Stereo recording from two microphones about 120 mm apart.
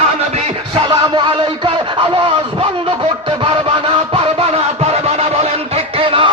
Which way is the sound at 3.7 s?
45° right (ahead or behind).